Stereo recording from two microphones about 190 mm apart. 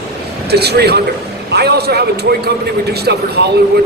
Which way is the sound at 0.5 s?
60° right (ahead or behind).